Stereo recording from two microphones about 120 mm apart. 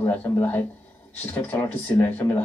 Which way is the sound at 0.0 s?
15° left (ahead or behind).